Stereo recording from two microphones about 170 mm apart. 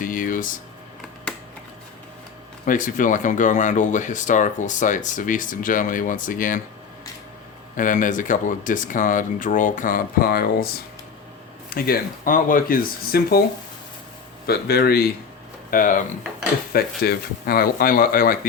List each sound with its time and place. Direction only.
0.0 s a sound: 55° left (ahead or behind)
2.6 s speech: 50° left (ahead or behind)
7.8 s speech: 50° left (ahead or behind)
11.7 s speech: 55° left (ahead or behind)
14.4 s a man's voice: 65° left (ahead or behind)
15.7 s speech: 55° left (ahead or behind)
16.7 s speech: 65° left (ahead or behind)